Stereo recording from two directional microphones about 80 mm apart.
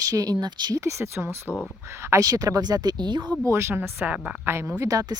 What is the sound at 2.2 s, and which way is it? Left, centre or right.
Speech, right.